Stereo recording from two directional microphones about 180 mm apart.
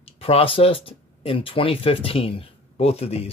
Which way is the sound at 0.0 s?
30° left (ahead or behind).